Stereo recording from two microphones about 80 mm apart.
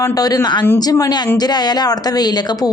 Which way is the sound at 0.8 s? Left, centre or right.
Left.